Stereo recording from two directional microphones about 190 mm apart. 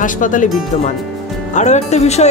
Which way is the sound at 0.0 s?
40° left (ahead or behind).